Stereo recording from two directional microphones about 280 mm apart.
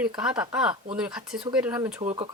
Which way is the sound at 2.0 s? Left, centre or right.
Right.